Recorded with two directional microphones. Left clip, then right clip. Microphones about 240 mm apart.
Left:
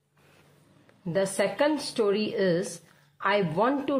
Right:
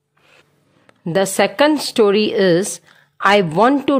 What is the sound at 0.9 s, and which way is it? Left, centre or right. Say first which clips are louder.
A woman's voice: right 10 dB; right.